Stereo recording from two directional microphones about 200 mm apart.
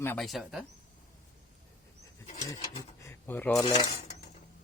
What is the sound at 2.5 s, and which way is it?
Dishes, 20° left (ahead or behind).